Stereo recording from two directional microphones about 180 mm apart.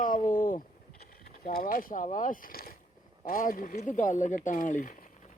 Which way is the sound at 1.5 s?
50° left (ahead or behind).